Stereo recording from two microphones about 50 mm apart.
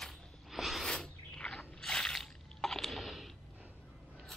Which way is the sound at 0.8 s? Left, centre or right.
Centre.